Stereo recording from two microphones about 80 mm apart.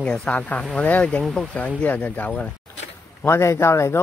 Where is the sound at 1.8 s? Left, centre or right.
Centre.